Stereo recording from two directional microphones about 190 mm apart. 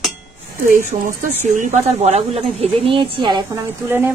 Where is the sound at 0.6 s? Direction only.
45° right (ahead or behind); by 4.1 s 10° right (ahead or behind).